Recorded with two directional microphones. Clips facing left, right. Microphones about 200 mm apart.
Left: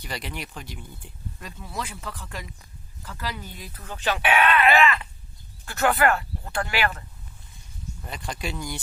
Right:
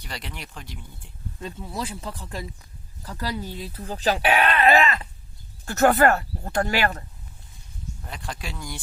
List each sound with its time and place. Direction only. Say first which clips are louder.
0.0 s speech: left 3 dB; centre (ahead or behind)
1.4 s speech: right 4 dB; 25° right (ahead or behind); by 7.0 s 40° right (ahead or behind)
8.0 s speech: left 3 dB; centre (ahead or behind)